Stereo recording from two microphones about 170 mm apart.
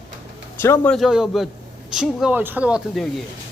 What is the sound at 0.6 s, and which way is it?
Speech, 15° left (ahead or behind).